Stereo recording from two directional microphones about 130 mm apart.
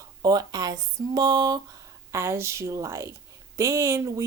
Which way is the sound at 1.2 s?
30° right (ahead or behind).